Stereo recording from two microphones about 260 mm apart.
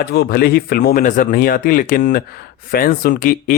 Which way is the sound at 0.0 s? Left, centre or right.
Left.